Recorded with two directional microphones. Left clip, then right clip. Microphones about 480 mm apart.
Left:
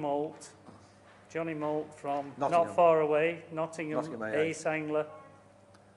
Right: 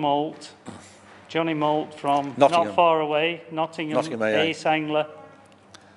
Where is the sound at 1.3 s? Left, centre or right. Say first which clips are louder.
Right 11 dB; centre.